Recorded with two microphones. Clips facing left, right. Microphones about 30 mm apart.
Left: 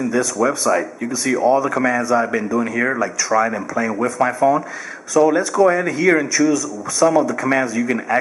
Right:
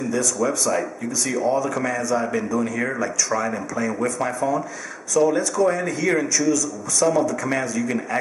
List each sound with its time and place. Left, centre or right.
0.1 s speech: left
7.2 s speech: left